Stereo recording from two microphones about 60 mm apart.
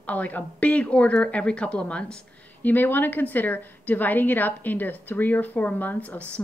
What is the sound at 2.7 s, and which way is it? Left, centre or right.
A woman's voice, left.